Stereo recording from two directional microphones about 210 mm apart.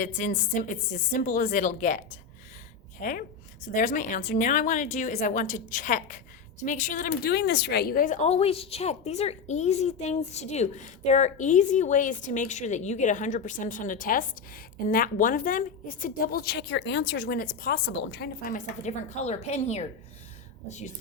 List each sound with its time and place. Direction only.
0.0 s speech: 35° left (ahead or behind)